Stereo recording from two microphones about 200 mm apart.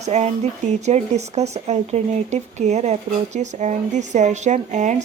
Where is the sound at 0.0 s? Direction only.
35° right (ahead or behind).